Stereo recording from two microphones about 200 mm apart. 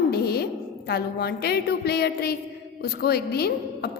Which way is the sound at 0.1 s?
50° left (ahead or behind).